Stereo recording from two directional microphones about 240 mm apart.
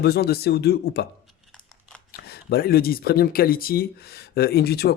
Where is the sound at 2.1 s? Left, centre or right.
Left.